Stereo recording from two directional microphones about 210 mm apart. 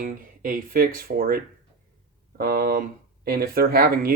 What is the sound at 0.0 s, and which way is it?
Speech, 45° right (ahead or behind).